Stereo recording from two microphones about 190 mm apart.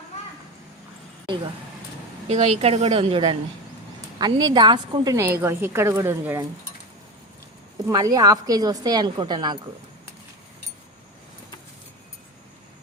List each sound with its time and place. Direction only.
2.3 s a woman's voice: 35° right (ahead or behind); by 6.4 s 15° right (ahead or behind)
7.9 s a woman's voice: 20° right (ahead or behind)